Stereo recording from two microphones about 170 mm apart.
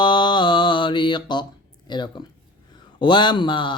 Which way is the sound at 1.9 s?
25° left (ahead or behind).